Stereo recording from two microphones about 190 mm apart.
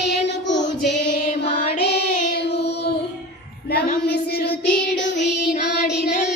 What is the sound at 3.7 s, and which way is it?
Child singing, 50° left (ahead or behind).